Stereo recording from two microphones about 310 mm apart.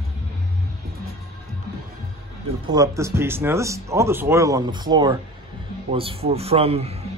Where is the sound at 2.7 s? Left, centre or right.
Centre.